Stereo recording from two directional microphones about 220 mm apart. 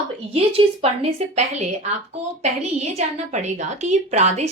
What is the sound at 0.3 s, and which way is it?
Speech, 25° right (ahead or behind).